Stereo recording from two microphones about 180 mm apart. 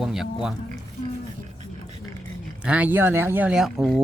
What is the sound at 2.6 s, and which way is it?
Speech, 10° right (ahead or behind).